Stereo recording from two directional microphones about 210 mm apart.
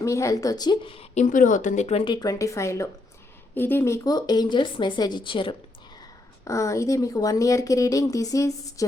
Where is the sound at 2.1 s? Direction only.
15° left (ahead or behind).